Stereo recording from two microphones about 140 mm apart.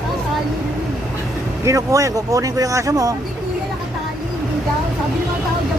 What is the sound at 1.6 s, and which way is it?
Speech, 20° right (ahead or behind).